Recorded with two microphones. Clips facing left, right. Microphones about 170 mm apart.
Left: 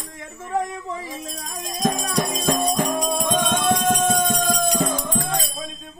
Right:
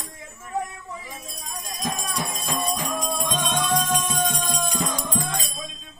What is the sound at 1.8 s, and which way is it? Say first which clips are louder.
Music: left 7 dB; 70° left (ahead or behind).